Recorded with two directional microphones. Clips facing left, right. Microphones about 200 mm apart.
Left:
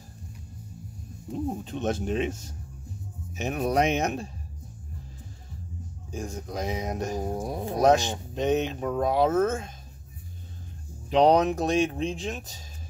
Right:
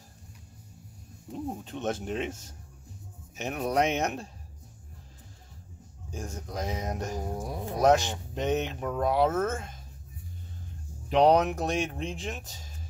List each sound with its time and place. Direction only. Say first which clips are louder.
1.3 s speech: left 4 dB; 20° left (ahead or behind)
6.1 s speech: left 3 dB; 10° left (ahead or behind)
11.1 s speech: left 2 dB; 15° left (ahead or behind)